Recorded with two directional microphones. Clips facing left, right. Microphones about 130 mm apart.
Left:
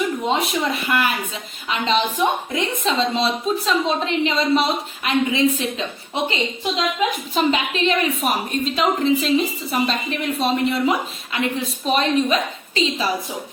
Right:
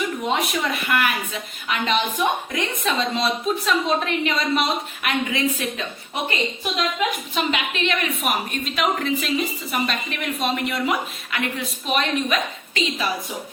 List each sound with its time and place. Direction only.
0.3 s a woman's voice: 25° left (ahead or behind)
7.3 s a woman's voice: 35° left (ahead or behind)